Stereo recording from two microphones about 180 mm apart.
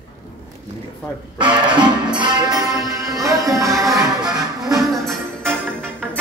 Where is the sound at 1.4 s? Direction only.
25° right (ahead or behind).